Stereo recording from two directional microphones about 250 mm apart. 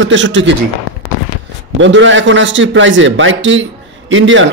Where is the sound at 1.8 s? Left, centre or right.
Right.